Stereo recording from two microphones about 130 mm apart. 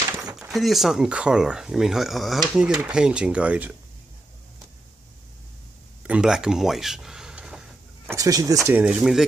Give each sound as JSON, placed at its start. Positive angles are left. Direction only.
{"t": 0.4, "sound": "speech", "side_deg": 0}
{"t": 6.0, "sound": "a sound", "side_deg": -5}
{"t": 8.1, "sound": "speech", "side_deg": -25}
{"t": 8.7, "sound": "speech", "side_deg": -5}